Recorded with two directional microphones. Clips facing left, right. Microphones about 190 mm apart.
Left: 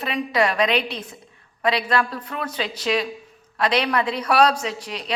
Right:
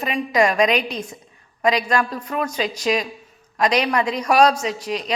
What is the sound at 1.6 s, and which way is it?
Speech, 10° right (ahead or behind).